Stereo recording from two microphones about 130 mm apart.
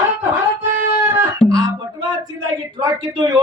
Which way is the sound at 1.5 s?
30° right (ahead or behind).